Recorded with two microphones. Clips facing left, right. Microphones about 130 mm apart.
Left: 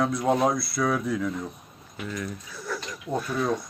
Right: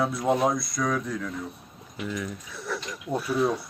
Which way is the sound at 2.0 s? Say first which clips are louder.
Right 1 dB; 5° right (ahead or behind).